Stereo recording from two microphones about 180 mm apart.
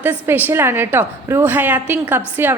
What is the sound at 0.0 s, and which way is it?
A woman's voice, 10° right (ahead or behind).